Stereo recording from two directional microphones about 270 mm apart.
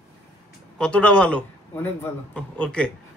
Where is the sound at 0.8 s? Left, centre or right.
Centre.